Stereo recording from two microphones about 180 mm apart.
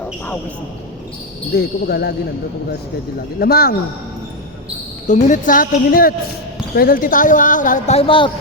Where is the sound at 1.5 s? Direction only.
60° left (ahead or behind).